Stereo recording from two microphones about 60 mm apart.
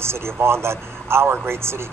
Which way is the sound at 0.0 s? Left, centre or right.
Right.